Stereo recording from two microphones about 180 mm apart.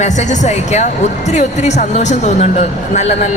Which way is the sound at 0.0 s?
40° left (ahead or behind).